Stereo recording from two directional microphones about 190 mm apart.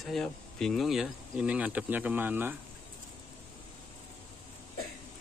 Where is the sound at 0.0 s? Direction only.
Centre (ahead or behind).